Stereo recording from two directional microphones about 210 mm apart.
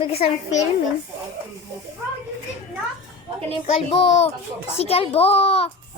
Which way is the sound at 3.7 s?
30° left (ahead or behind).